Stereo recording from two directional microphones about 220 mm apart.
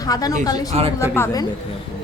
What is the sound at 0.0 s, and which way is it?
Speech, 15° left (ahead or behind).